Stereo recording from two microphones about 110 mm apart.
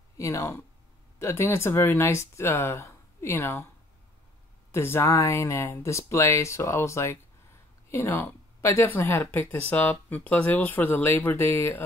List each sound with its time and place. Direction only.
0.2 s speech: 30° left (ahead or behind)
4.7 s speech: 20° left (ahead or behind)